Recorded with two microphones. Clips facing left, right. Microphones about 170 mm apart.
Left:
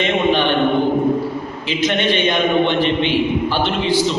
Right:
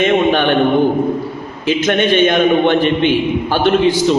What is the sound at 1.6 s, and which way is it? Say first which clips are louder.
A man's voice: right 5 dB; 50° right (ahead or behind).